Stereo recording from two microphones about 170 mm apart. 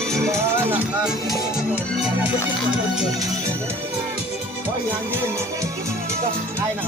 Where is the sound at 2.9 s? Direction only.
5° right (ahead or behind).